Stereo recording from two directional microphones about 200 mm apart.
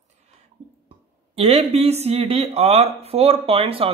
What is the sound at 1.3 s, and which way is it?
Speech, 30° right (ahead or behind).